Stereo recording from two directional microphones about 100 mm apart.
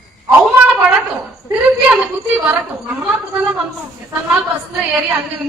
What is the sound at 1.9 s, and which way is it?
Speech, 10° right (ahead or behind).